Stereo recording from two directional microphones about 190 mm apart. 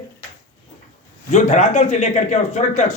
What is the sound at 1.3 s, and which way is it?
A man's voice, 40° left (ahead or behind).